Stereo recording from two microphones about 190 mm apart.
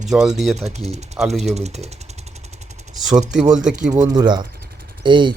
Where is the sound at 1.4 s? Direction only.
35° right (ahead or behind).